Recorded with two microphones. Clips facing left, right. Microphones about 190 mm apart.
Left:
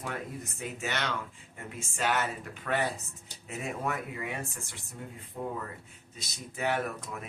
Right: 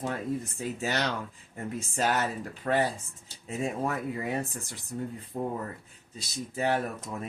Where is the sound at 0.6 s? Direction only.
35° right (ahead or behind).